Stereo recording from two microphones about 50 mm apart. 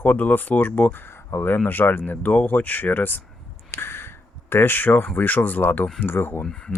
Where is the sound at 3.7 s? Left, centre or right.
Left.